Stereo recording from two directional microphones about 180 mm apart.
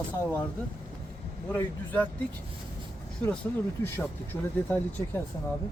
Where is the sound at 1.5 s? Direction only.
10° left (ahead or behind).